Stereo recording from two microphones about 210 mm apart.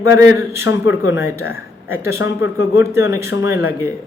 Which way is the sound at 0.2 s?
10° right (ahead or behind).